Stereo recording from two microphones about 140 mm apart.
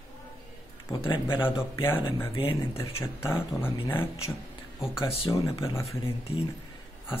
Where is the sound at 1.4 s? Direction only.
15° left (ahead or behind).